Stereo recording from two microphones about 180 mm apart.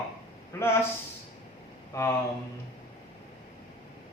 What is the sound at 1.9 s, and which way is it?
Speech, 15° left (ahead or behind).